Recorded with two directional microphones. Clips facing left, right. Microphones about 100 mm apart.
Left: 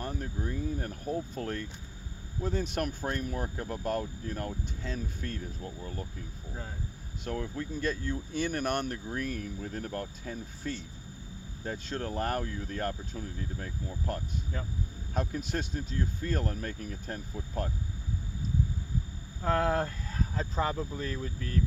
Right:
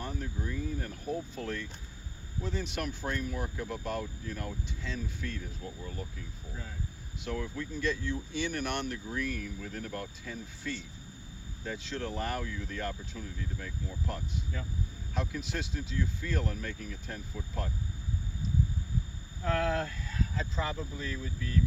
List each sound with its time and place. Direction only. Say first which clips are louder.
0.0 s a sound: left 2 dB; 45° left (ahead or behind)
1.5 s speech: left 1 dB; 45° left (ahead or behind)
7.3 s speech: left 1 dB; 40° left (ahead or behind)
19.4 s speech: left 3 dB; 40° left (ahead or behind)